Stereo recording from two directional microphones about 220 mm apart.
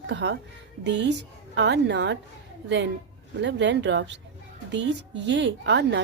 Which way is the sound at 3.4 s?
55° right (ahead or behind).